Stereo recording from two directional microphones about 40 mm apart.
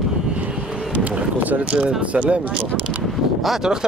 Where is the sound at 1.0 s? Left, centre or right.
Right.